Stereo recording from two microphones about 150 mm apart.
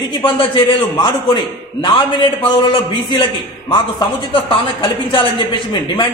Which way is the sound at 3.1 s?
30° left (ahead or behind).